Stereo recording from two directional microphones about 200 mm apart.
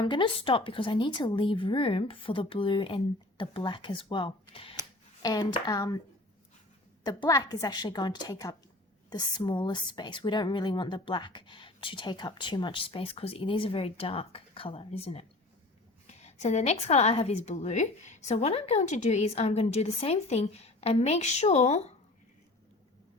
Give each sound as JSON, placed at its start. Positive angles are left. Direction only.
{"t": 0.0, "sound": "speech", "side_deg": 25}
{"t": 7.0, "sound": "a woman's voice", "side_deg": 20}